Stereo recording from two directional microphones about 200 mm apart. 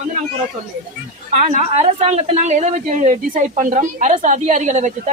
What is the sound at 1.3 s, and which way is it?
A woman's voice, 35° right (ahead or behind).